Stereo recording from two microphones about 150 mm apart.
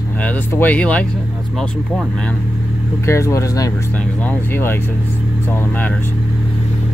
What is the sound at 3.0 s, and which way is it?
Speech, 20° left (ahead or behind).